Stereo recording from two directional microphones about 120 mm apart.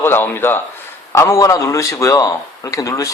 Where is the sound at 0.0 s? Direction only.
20° left (ahead or behind).